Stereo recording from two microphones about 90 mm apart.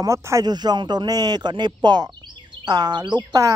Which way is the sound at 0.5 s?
50° right (ahead or behind).